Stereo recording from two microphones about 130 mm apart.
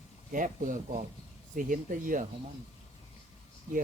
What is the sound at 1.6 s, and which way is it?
Speech, 90° right.